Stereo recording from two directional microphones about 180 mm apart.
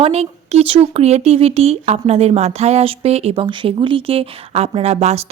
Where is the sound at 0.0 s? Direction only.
35° right (ahead or behind).